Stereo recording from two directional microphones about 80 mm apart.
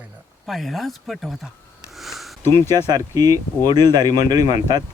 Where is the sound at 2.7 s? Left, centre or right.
Right.